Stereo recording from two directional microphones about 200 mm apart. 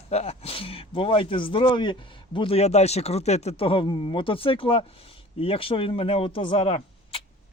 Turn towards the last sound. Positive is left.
turn(degrees=30)  # may be behind; listen again after turning